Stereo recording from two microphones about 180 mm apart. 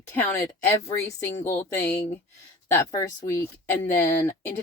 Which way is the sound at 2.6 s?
15° left (ahead or behind).